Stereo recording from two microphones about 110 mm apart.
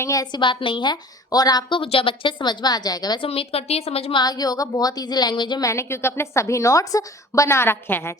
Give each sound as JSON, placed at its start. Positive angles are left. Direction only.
{"t": 0.0, "sound": "a woman's voice", "side_deg": 30}
{"t": 1.8, "sound": "a woman's voice", "side_deg": 55}
{"t": 3.2, "sound": "a woman's voice", "side_deg": 60}
{"t": 4.2, "sound": "a woman's voice", "side_deg": 35}
{"t": 5.6, "sound": "a woman's voice", "side_deg": 25}